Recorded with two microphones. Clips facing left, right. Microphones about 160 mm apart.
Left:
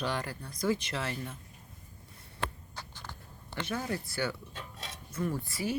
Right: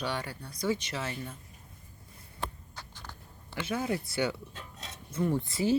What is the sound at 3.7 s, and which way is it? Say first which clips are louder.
Speech: right 4 dB; 20° right (ahead or behind).